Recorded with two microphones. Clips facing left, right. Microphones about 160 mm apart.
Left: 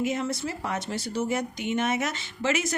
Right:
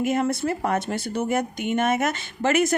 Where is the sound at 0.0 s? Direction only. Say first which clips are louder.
Right 5 dB; 55° right (ahead or behind).